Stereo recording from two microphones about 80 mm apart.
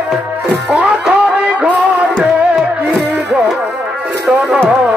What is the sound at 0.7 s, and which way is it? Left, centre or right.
Music, centre.